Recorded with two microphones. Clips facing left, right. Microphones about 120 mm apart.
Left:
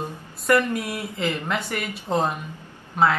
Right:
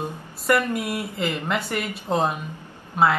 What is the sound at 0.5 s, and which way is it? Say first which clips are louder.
A woman's voice: left 1 dB; 5° right (ahead or behind).